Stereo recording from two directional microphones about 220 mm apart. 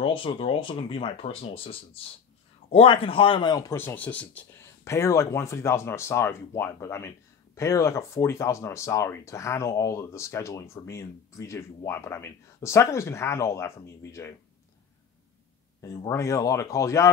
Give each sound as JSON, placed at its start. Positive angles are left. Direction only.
{"t": 0.0, "sound": "a man's voice", "side_deg": 25}
{"t": 15.8, "sound": "a man's voice", "side_deg": 15}